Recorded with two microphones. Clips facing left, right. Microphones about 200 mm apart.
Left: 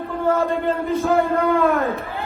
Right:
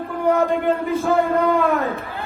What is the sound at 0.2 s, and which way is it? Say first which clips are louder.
Speech: right 2 dB; 15° right (ahead or behind).